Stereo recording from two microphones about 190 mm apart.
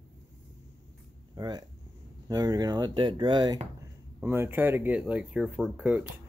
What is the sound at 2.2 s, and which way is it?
Speech, 20° right (ahead or behind).